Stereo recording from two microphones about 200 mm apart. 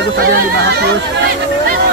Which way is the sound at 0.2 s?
55° right (ahead or behind).